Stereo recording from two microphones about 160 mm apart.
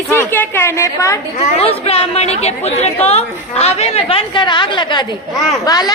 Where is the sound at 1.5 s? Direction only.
40° left (ahead or behind).